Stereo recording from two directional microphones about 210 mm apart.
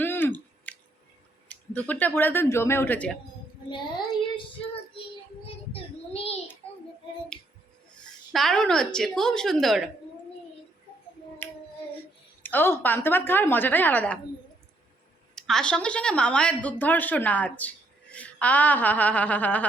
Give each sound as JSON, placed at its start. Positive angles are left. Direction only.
{"t": 0.0, "sound": "a sound", "side_deg": 10}
{"t": 1.9, "sound": "a woman's voice", "side_deg": 10}
{"t": 5.7, "sound": "child singing", "side_deg": 30}
{"t": 7.3, "sound": "a sound", "side_deg": 5}
{"t": 7.9, "sound": "speech", "side_deg": 0}
{"t": 12.4, "sound": "a woman's voice", "side_deg": 10}
{"t": 15.4, "sound": "a woman's voice", "side_deg": 0}